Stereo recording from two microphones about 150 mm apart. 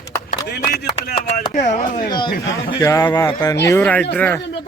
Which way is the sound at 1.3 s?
55° left (ahead or behind).